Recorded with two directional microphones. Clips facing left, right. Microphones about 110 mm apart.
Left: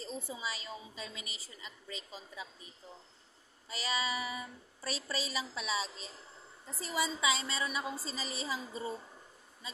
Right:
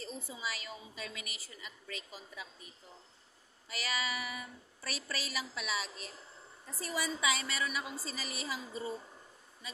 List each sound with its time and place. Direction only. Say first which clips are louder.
0.0 s a woman's voice: left 1 dB; 30° left (ahead or behind)
3.6 s a woman's voice: left 2 dB; 30° left (ahead or behind)